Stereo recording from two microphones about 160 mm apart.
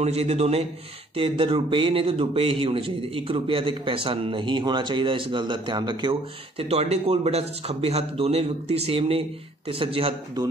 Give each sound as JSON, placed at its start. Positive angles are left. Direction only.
{"t": 0.0, "sound": "speech", "side_deg": -40}
{"t": 6.6, "sound": "speech", "side_deg": -40}